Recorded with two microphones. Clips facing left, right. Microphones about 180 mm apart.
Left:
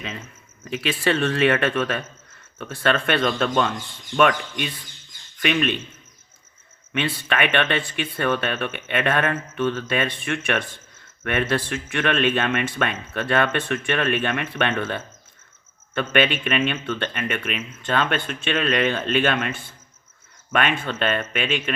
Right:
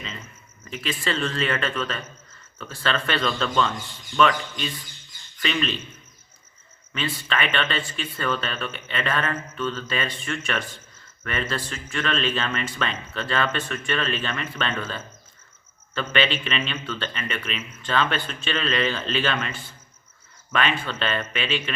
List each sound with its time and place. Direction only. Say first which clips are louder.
0.0 s speech: left 4 dB; 75° left (ahead or behind); by 5.8 s 55° left (ahead or behind)
6.9 s speech: left 3 dB; 60° left (ahead or behind)